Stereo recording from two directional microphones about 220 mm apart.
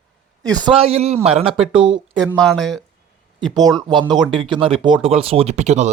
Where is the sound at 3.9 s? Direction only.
20° right (ahead or behind).